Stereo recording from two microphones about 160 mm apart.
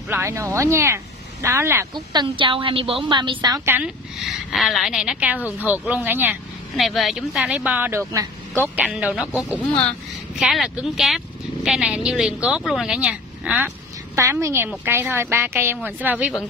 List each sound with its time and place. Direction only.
0.1 s a woman's voice: 15° right (ahead or behind)
2.1 s a woman's voice: 30° right (ahead or behind); by 3.9 s 15° right (ahead or behind)
4.2 s a woman's voice: centre (ahead or behind)
6.8 s a woman's voice: centre (ahead or behind); by 8.6 s 20° right (ahead or behind)
8.7 s speech: 5° right (ahead or behind)
9.6 s speech: 10° left (ahead or behind); by 13.7 s 5° right (ahead or behind)
14.1 s a woman's voice: 20° right (ahead or behind)